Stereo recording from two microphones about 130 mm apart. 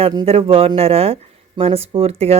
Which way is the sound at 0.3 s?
50° right (ahead or behind).